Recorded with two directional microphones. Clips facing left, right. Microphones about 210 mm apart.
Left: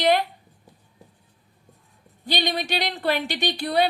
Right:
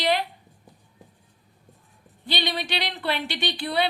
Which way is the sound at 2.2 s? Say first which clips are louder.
Left 3 dB; 45° left (ahead or behind).